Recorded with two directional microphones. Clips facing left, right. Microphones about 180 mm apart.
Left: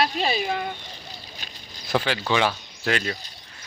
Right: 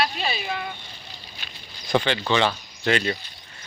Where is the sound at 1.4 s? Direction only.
40° left (ahead or behind).